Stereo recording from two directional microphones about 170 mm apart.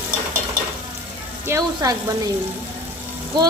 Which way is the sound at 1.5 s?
20° right (ahead or behind).